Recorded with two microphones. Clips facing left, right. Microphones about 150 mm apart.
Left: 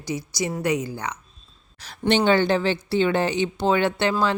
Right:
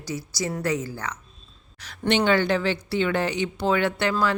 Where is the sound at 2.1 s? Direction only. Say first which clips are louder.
Left 2 dB; 30° left (ahead or behind).